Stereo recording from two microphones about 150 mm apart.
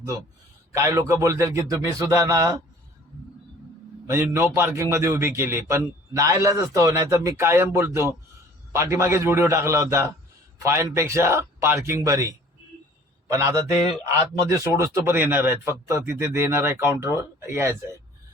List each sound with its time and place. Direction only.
0.7 s a man's voice: 20° right (ahead or behind)
4.0 s a man's voice: 15° right (ahead or behind)
14.5 s a man's voice: 20° right (ahead or behind)